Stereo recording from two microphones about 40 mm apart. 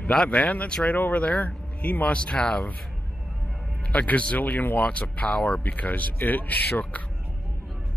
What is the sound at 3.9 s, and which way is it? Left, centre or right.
Speech, left.